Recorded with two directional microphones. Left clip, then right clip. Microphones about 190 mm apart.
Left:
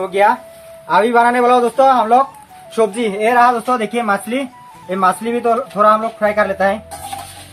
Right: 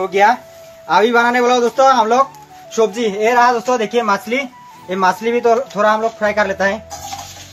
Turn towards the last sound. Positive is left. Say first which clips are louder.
# left 1 dB
turn(degrees=-35)  # may be behind; listen again after turning